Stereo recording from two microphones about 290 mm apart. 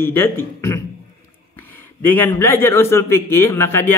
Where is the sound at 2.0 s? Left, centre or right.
Centre.